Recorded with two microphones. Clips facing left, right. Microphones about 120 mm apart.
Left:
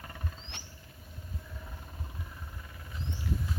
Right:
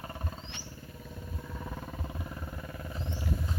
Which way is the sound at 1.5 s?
90° right.